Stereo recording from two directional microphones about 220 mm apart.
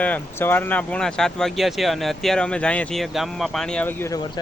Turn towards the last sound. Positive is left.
turn(degrees=10)  # may be behind; listen again after turning